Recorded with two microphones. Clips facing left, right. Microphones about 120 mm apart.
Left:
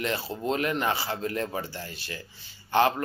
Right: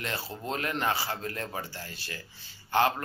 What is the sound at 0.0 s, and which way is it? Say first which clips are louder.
Speech: left 6 dB; 20° left (ahead or behind).